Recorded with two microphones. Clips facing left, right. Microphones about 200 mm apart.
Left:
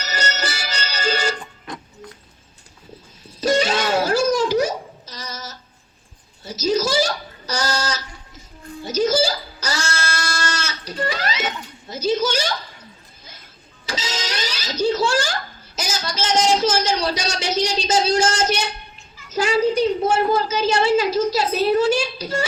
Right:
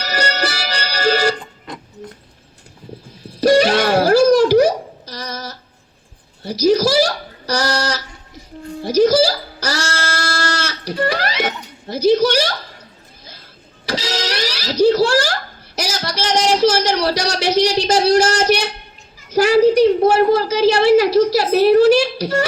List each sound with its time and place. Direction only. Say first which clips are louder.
0.0 s music: right 5 dB; 65° right (ahead or behind)
3.4 s wail: right 6 dB; 65° right (ahead or behind)
6.4 s speech: right 6 dB; 65° right (ahead or behind)
8.8 s music: right 7 dB; 65° right (ahead or behind)
9.1 s child singing: right 5 dB; 65° right (ahead or behind)
11.0 s speech: right 5 dB; 70° right (ahead or behind)
13.8 s music: right 6 dB; 65° right (ahead or behind)
15.0 s a sound: right 5 dB; 65° right (ahead or behind)